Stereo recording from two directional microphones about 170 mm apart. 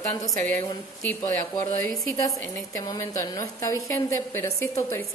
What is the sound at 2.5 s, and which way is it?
A woman's voice, 20° left (ahead or behind).